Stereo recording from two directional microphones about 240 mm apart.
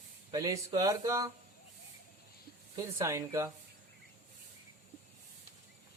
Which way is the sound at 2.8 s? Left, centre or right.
Centre.